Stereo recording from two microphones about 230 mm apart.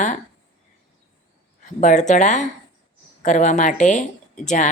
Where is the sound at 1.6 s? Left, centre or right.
Left.